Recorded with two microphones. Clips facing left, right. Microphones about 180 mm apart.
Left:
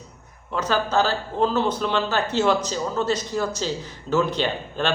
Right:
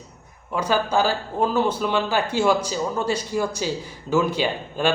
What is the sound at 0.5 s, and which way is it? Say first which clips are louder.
Speech: right 1 dB; 10° right (ahead or behind).